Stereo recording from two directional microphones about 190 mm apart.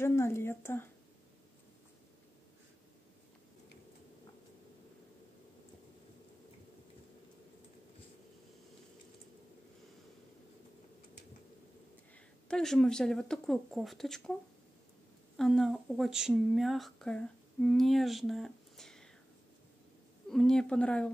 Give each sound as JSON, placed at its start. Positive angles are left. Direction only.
{"t": 0.0, "sound": "a woman's voice", "side_deg": 15}
{"t": 12.4, "sound": "speech", "side_deg": 5}
{"t": 15.3, "sound": "speech", "side_deg": 0}
{"t": 20.2, "sound": "speech", "side_deg": 5}